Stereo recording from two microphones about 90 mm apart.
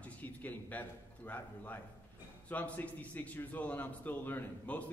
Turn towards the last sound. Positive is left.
turn(degrees=20)  # may be behind; listen again after turning